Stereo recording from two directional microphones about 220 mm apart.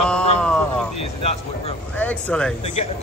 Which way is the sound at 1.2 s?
25° left (ahead or behind).